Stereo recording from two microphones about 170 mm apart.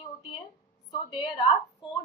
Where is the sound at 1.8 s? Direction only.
25° left (ahead or behind).